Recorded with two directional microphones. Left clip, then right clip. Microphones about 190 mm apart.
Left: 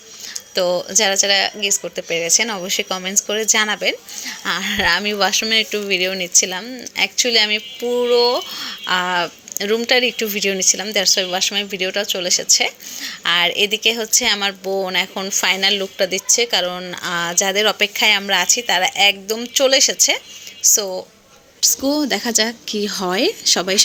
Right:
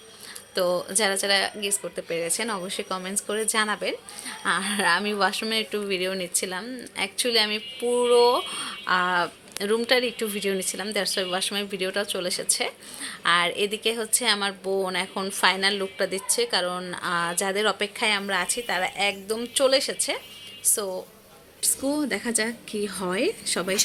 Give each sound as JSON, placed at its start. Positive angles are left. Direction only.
{"t": 0.5, "sound": "a woman's voice", "side_deg": 15}